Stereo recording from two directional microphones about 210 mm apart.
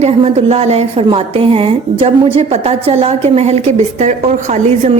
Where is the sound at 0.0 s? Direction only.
30° right (ahead or behind).